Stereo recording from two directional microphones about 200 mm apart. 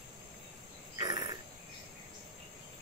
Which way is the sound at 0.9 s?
20° right (ahead or behind).